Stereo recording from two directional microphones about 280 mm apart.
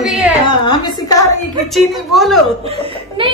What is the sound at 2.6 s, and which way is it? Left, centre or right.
Speech, right.